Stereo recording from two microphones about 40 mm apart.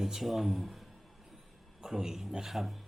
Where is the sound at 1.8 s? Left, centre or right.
Centre.